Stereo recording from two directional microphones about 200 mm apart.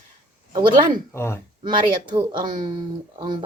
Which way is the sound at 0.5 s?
25° right (ahead or behind).